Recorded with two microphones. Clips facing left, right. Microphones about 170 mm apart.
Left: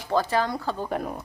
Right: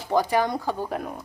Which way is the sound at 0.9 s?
Centre (ahead or behind).